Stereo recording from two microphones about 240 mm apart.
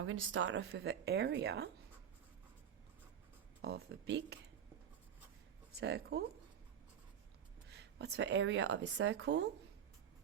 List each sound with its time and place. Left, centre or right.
0.0 s a woman's voice: right
3.6 s a woman's voice: right
5.7 s a woman's voice: right
7.7 s a woman's voice: right